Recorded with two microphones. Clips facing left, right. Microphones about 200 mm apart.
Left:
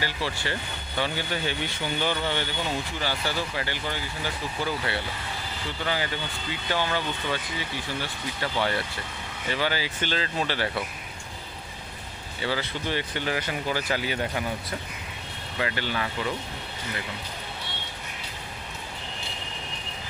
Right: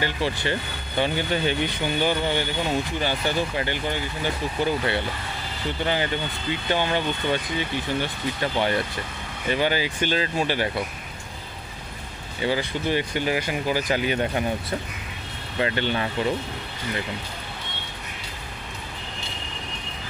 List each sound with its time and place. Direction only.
0.0 s speech: 20° right (ahead or behind)
12.4 s speech: 15° right (ahead or behind)
15.6 s speech: 25° right (ahead or behind)